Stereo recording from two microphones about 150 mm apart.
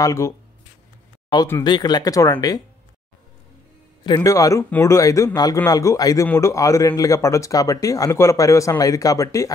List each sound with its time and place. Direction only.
0.0 s speech: 20° left (ahead or behind)
1.6 s speech: 30° left (ahead or behind)
4.0 s speech: 25° left (ahead or behind)